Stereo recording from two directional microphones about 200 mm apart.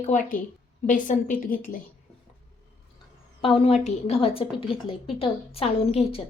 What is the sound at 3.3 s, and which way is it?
A woman's voice, 30° left (ahead or behind).